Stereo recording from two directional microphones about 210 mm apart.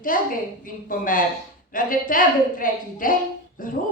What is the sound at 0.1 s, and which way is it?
A woman's voice, 40° left (ahead or behind).